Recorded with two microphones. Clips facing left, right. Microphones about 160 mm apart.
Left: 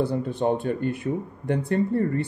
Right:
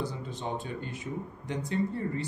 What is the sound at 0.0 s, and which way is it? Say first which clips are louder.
Speech: left 11 dB; 60° left (ahead or behind).